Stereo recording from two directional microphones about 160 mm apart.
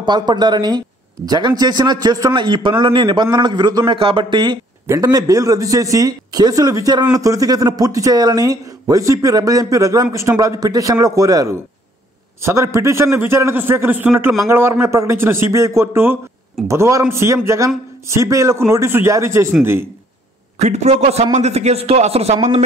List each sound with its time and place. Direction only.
0.0 s a man's voice: 25° right (ahead or behind)
20.5 s a man's voice: 45° right (ahead or behind)